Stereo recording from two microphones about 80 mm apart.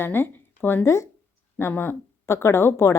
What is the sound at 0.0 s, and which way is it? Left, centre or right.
Speech, left.